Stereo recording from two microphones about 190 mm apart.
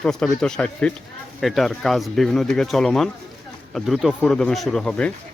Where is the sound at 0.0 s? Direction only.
5° left (ahead or behind).